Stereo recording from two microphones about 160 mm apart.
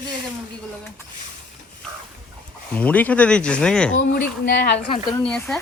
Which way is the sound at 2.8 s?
10° left (ahead or behind).